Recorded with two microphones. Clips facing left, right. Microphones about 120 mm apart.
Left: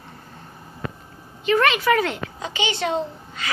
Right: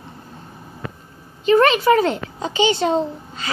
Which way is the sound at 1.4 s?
35° right (ahead or behind).